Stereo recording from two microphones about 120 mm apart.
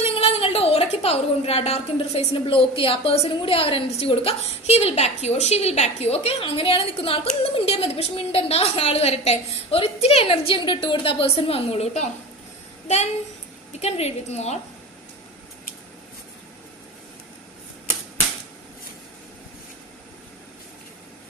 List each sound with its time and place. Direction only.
0.0 s a woman's voice: 55° left (ahead or behind)
13.7 s a woman's voice: 65° left (ahead or behind)